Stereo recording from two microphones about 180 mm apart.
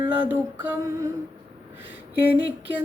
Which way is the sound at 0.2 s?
10° right (ahead or behind).